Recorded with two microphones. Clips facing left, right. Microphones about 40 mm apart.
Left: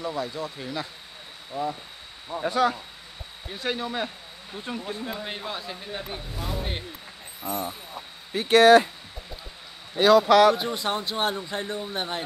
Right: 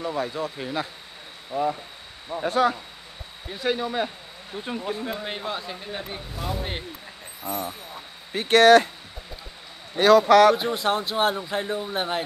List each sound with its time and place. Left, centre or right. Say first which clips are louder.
0.0 s speech: right 3 dB; right
2.5 s speech: right 2 dB; centre
8.4 s speech: right 1 dB; right
9.9 s a man's voice: right 2 dB; right
10.5 s speech: right 3 dB; centre